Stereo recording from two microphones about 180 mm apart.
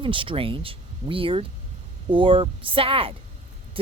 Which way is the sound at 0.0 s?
30° right (ahead or behind).